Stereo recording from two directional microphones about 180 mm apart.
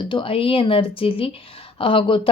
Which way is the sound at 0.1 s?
30° left (ahead or behind).